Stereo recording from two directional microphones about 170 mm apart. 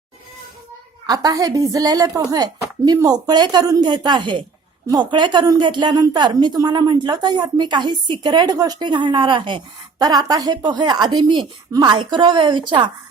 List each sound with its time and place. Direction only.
1.0 s a woman's voice: 20° right (ahead or behind)